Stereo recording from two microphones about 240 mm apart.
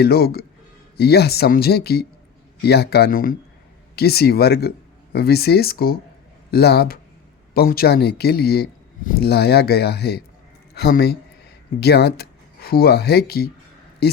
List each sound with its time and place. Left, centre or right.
0.0 s a man's voice: left